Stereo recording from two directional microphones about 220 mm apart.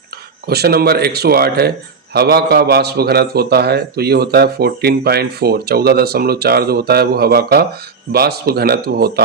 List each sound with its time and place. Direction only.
0.4 s a man's voice: 45° right (ahead or behind)